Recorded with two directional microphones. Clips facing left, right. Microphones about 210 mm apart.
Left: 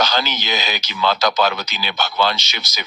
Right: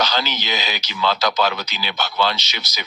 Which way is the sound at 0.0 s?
50° left (ahead or behind).